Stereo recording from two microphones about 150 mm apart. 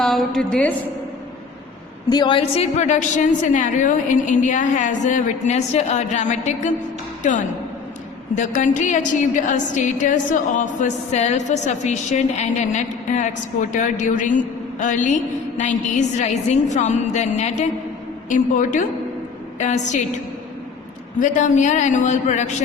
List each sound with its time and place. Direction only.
0.0 s a woman's voice: centre (ahead or behind)
2.0 s a woman's voice: 30° left (ahead or behind); by 20.0 s 50° left (ahead or behind)
21.2 s a woman's voice: 55° left (ahead or behind)